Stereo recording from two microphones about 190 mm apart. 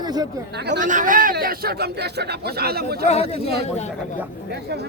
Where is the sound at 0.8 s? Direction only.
40° right (ahead or behind).